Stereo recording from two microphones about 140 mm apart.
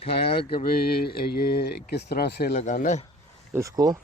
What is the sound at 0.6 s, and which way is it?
Mantra, 90° left.